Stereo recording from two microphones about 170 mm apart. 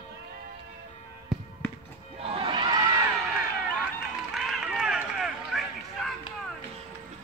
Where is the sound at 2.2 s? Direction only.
30° right (ahead or behind).